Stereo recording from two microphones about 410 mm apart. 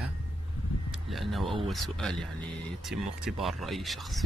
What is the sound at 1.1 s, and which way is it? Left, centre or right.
Speech, centre.